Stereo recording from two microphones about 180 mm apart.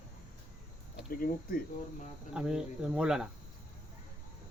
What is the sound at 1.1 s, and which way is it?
Speech, 55° left (ahead or behind).